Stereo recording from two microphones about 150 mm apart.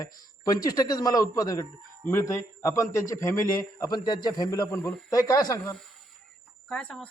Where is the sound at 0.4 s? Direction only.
25° left (ahead or behind).